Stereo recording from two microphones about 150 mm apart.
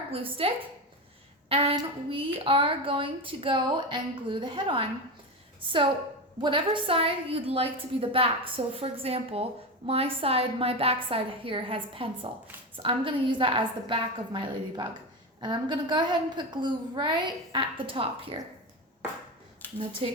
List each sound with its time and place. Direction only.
0.1 s a woman's voice: 40° right (ahead or behind)
20.0 s a woman's voice: 35° right (ahead or behind)